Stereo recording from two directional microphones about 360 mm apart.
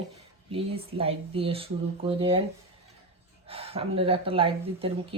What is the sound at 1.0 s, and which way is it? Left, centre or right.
A woman's voice, centre.